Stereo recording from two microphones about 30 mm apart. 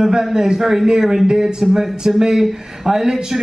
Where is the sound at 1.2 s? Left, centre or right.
Right.